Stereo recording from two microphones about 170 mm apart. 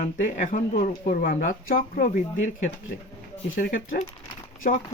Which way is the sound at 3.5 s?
55° left (ahead or behind).